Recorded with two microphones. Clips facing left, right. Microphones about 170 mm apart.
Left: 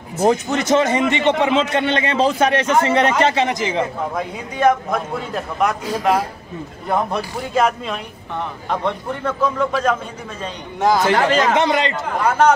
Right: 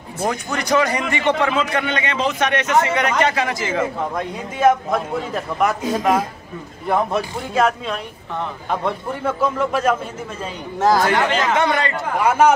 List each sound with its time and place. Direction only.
0.2 s a man's voice: 25° left (ahead or behind)
4.1 s a man's voice: centre (ahead or behind)
11.5 s a man's voice: 20° left (ahead or behind)
12.2 s a man's voice: 10° right (ahead or behind)